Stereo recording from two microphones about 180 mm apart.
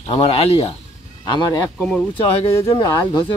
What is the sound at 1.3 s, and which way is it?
Speech, 20° left (ahead or behind).